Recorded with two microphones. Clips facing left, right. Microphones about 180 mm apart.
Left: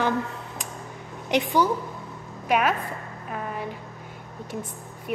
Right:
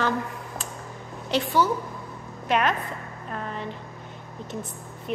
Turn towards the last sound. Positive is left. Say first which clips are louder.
# even
turn(degrees=10)  # may be behind; listen again after turning